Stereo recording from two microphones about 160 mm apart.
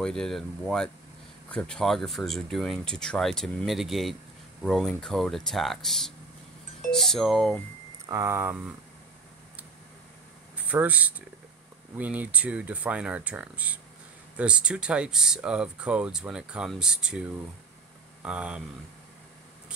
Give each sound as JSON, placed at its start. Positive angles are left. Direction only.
{"t": 0.0, "sound": "speech", "side_deg": 5}
{"t": 8.1, "sound": "speech", "side_deg": -15}
{"t": 10.7, "sound": "speech", "side_deg": -10}